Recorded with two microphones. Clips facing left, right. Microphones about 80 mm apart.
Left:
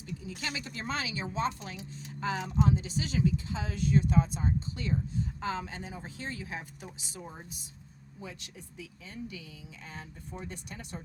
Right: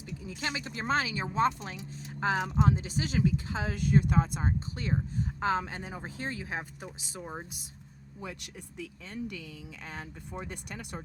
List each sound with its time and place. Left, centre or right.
0.3 s speech: right
7.1 s speech: right